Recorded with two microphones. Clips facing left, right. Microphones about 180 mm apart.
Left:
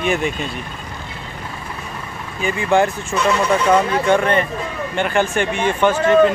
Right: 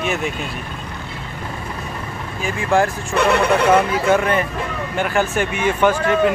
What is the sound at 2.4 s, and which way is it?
Speech, centre (ahead or behind).